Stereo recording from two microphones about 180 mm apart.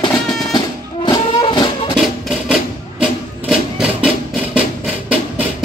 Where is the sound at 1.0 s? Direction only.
25° left (ahead or behind).